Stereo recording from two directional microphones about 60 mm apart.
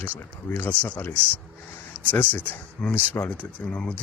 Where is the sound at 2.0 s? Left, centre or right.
Left.